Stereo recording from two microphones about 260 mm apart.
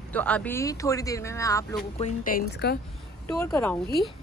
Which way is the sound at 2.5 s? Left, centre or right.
Left.